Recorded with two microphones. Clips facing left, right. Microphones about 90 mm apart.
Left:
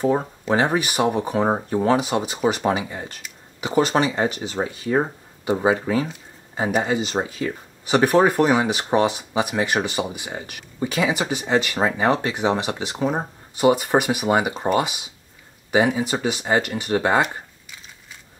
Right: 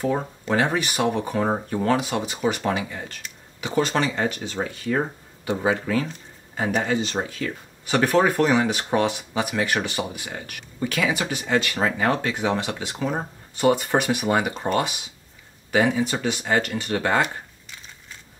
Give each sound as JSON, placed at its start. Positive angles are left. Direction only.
{"t": 0.0, "sound": "speech", "side_deg": 20}